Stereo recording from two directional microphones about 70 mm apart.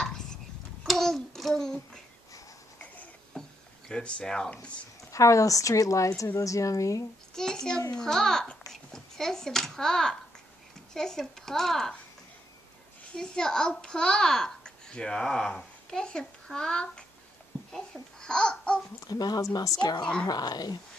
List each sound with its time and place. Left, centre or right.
0.0 s tick-tock: centre
0.8 s child singing: centre
3.3 s a sound: centre
3.9 s speech: centre
5.1 s speech: left
7.3 s a child's voice: centre
13.1 s a child's voice: centre
18.9 s speech: left
19.8 s speech: left
20.2 s speech: left